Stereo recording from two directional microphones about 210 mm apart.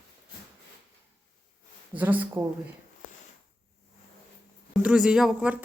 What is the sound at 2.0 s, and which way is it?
Speech, 10° right (ahead or behind).